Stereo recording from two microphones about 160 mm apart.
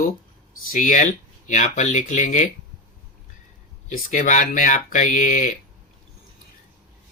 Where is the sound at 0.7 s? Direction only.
55° left (ahead or behind).